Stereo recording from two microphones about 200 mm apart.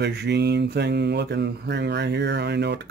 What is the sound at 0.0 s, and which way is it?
Speech, 55° right (ahead or behind).